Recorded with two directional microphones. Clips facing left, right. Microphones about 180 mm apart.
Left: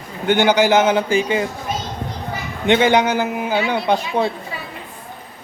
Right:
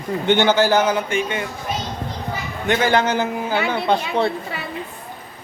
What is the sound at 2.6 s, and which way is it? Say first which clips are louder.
A man's voice: left 3 dB; 20° left (ahead or behind).